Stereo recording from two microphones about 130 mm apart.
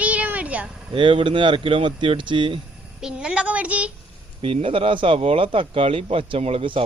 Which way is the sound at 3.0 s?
5° right (ahead or behind).